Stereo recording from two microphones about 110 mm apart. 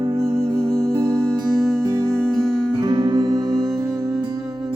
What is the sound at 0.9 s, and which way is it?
Music, 30° right (ahead or behind).